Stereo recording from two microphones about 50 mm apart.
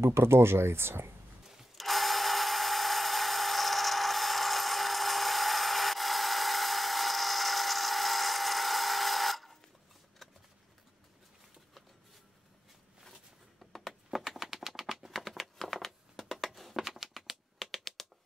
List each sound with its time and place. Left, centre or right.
0.0 s speech: right
1.4 s tools: centre
13.7 s a sound: centre
17.6 s typewriter: centre